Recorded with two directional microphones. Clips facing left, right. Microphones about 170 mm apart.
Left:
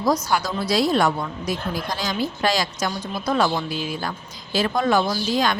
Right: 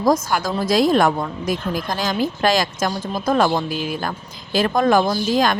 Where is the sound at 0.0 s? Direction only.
50° right (ahead or behind).